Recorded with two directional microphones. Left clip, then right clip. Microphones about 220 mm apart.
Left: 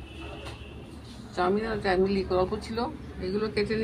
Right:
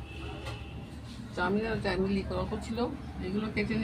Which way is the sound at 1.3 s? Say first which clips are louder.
Left 4 dB; 15° left (ahead or behind).